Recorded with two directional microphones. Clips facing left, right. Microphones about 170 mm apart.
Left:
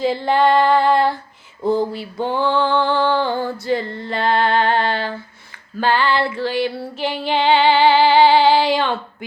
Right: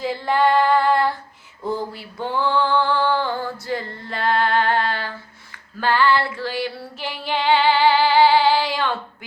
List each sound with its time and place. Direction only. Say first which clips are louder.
0.0 s female singing: left 3 dB; 25° left (ahead or behind)